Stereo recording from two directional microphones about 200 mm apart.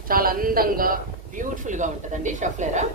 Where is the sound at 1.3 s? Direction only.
40° right (ahead or behind).